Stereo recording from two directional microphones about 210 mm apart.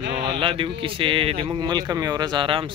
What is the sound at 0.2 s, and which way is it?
Speech, 25° right (ahead or behind).